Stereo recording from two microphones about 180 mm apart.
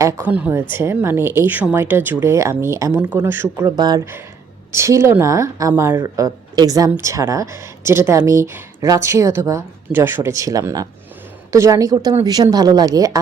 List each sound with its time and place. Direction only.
0.0 s a woman's voice: 10° right (ahead or behind)